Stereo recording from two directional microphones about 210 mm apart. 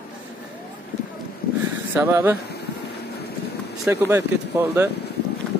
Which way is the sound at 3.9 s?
10° right (ahead or behind).